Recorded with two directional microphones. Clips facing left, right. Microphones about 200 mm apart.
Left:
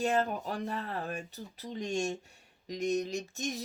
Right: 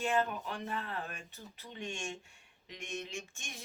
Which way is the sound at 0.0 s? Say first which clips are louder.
Left 3 dB; 40° left (ahead or behind).